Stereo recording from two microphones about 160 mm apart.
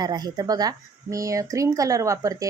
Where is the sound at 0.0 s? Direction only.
25° right (ahead or behind).